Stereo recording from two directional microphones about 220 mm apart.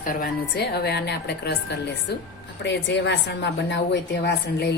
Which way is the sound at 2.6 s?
55° left (ahead or behind).